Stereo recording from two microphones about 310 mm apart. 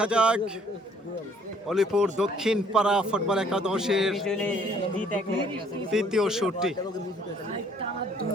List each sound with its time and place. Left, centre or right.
0.0 s a man's voice: centre
1.6 s a man's voice: centre
5.9 s a man's voice: centre